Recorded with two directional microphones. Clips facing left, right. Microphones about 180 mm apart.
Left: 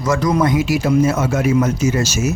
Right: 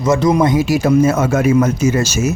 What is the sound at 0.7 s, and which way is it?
Speech, 50° right (ahead or behind).